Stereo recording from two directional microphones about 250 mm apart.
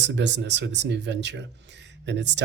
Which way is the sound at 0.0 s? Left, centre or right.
Right.